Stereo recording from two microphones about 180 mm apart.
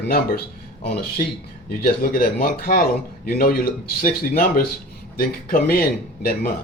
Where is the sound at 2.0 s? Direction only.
50° left (ahead or behind).